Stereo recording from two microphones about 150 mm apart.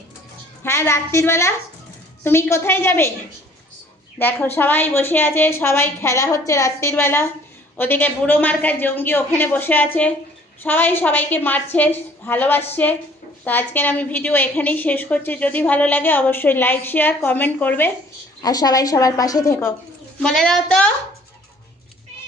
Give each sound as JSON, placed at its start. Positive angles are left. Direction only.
{"t": 0.6, "sound": "a woman's voice", "side_deg": 15}
{"t": 4.2, "sound": "a woman's voice", "side_deg": 15}
{"t": 18.4, "sound": "a woman's voice", "side_deg": 25}
{"t": 20.1, "sound": "a woman's voice", "side_deg": 5}